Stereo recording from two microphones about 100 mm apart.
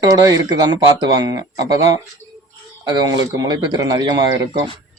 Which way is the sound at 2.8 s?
45° right (ahead or behind).